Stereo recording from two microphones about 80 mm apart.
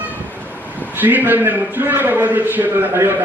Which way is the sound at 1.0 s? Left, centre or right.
Right.